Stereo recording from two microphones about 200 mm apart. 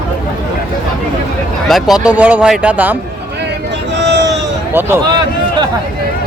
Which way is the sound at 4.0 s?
60° right (ahead or behind).